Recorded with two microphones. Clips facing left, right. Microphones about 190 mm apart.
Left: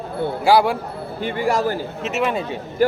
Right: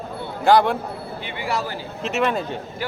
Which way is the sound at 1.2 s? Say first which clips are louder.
Left 8 dB; 45° left (ahead or behind).